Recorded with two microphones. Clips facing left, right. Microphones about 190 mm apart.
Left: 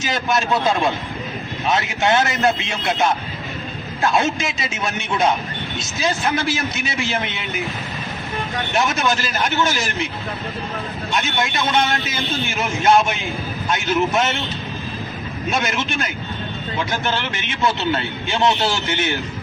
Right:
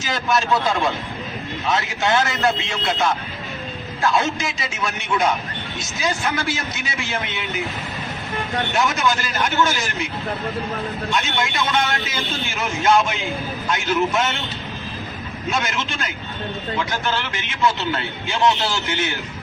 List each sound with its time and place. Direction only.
0.0 s a man's voice: 20° left (ahead or behind)
6.3 s a man's voice: 20° left (ahead or behind)
8.7 s a man's voice: 20° left (ahead or behind)
11.3 s a man's voice: 20° left (ahead or behind)
15.4 s a man's voice: 20° left (ahead or behind)